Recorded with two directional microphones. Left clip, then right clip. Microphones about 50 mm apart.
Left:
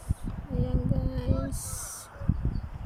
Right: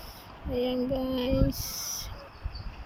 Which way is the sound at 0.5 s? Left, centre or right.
Right.